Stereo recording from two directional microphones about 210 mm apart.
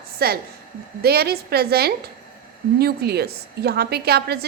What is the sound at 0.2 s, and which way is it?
A woman's voice, 50° right (ahead or behind).